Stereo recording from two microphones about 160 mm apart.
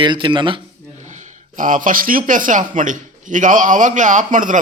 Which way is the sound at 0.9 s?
50° right (ahead or behind).